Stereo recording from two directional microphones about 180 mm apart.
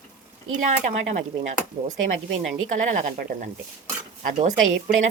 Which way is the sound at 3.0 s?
50° right (ahead or behind).